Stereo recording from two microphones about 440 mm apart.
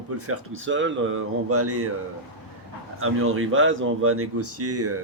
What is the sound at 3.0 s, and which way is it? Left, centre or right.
Speech, right.